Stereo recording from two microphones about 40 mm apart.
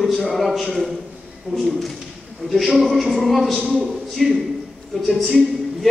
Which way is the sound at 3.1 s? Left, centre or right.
Centre.